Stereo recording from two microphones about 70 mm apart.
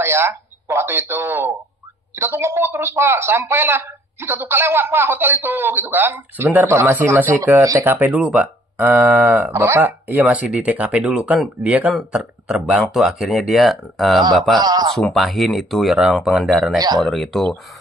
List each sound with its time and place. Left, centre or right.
0.0 s speech: right
6.7 s speech: right
7.8 s speech: right
9.5 s speech: right
9.8 s a man's voice: right
12.9 s speech: centre
14.6 s speech: right
15.1 s speech: centre
16.7 s speech: right
17.0 s speech: centre